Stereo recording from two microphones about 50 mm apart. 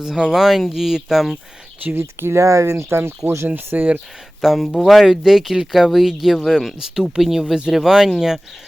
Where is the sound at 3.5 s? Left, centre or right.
Right.